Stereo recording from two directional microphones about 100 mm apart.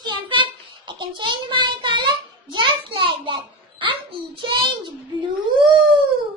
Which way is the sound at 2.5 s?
55° right (ahead or behind).